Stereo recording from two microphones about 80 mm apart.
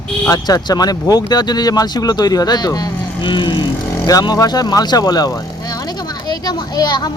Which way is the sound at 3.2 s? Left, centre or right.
Left.